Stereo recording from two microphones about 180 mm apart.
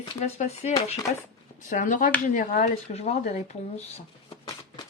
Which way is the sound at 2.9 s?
40° left (ahead or behind).